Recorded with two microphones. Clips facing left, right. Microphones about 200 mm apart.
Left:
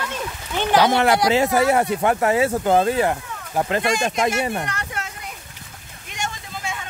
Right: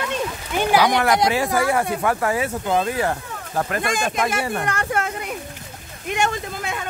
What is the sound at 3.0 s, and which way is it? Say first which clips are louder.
Speech: left 2 dB; 15° left (ahead or behind).